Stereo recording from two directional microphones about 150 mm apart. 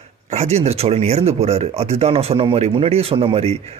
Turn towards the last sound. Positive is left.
turn(degrees=-40)  # may be behind; listen again after turning